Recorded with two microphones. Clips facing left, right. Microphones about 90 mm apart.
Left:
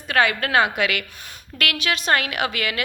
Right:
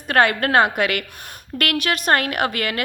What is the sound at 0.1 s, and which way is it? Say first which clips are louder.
A woman's voice: right 3 dB; 50° right (ahead or behind).